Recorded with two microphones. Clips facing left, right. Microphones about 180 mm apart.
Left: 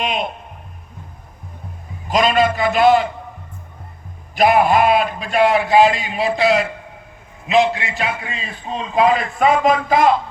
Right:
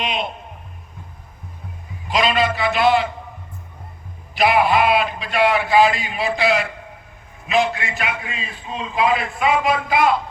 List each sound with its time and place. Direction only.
0.0 s a man's voice: 45° left (ahead or behind)
2.0 s a man's voice: 45° left (ahead or behind)
4.4 s a man's voice: 45° left (ahead or behind)